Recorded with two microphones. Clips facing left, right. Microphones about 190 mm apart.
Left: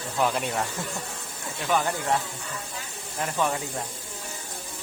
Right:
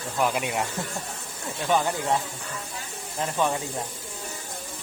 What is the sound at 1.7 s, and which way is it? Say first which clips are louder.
Speech: right 1 dB; 20° right (ahead or behind).